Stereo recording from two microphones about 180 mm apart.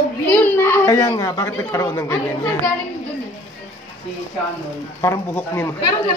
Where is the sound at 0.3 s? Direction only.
10° left (ahead or behind).